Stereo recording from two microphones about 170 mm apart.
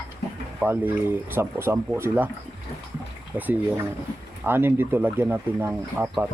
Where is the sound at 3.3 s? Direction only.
10° right (ahead or behind).